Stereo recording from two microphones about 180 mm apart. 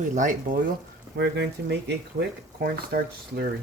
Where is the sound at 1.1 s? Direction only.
70° right (ahead or behind).